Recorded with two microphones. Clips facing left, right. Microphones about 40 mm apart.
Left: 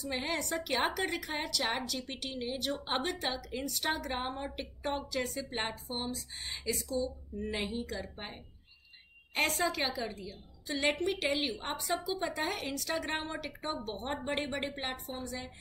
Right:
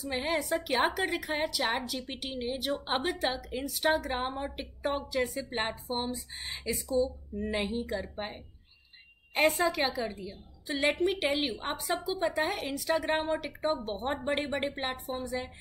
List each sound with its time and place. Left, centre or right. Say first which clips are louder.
0.0 s a woman's voice: right 4 dB; centre